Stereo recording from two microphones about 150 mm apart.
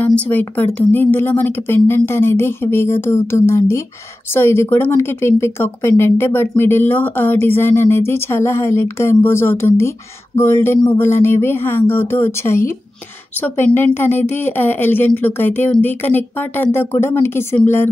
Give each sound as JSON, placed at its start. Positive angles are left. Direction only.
{"t": 0.0, "sound": "speech", "side_deg": 10}